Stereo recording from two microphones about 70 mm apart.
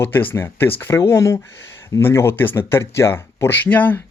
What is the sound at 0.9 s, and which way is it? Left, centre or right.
Speech, left.